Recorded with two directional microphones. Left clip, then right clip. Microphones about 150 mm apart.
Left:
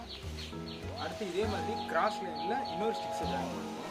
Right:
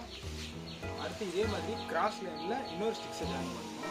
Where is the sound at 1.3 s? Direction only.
Centre (ahead or behind).